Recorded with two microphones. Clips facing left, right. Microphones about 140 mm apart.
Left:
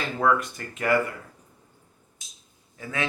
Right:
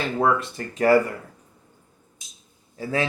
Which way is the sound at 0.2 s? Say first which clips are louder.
Even; 30° right (ahead or behind).